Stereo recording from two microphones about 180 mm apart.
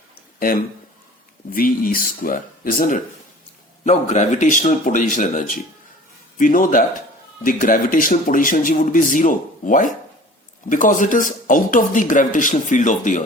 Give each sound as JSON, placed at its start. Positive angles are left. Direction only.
{"t": 0.3, "sound": "speech", "side_deg": 55}